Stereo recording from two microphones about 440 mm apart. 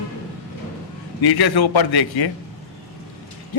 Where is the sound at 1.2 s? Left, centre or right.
Left.